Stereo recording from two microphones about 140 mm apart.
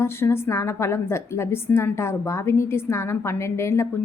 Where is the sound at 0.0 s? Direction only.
15° left (ahead or behind).